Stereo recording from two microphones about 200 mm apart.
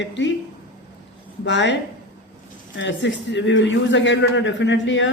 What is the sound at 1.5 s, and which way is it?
A man's voice, 65° left (ahead or behind).